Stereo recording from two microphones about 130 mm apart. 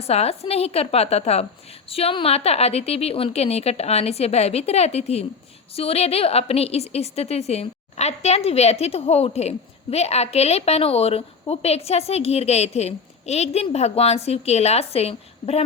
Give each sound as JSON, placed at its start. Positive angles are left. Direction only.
{"t": 0.0, "sound": "a woman's voice", "side_deg": 50}